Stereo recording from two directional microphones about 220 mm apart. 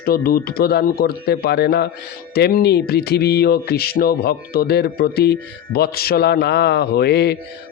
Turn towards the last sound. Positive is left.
turn(degrees=50)  # may be behind; listen again after turning